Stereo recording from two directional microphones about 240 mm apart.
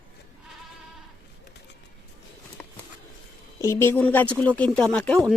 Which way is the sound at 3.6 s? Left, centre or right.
Centre.